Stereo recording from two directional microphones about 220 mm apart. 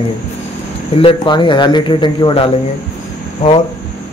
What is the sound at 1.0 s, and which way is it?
Speech, 20° left (ahead or behind).